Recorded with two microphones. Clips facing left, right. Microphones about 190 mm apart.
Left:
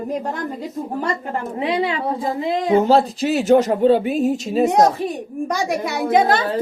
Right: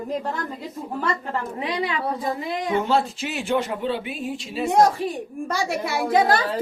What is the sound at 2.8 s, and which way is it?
Speech, 40° left (ahead or behind).